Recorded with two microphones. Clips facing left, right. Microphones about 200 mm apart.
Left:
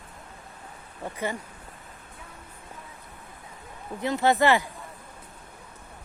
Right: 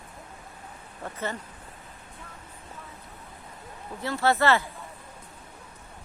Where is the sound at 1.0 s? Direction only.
10° left (ahead or behind).